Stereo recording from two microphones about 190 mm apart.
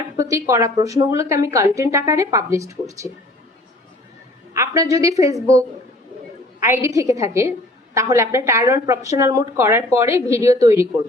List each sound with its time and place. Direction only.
0.2 s a woman's voice: 15° right (ahead or behind)
4.5 s a woman's voice: 15° right (ahead or behind)